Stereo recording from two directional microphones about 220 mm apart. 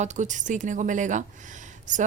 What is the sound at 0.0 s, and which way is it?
Speech, 35° right (ahead or behind).